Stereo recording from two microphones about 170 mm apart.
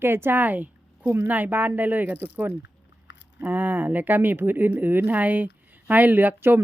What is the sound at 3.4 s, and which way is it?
Speech, 10° right (ahead or behind).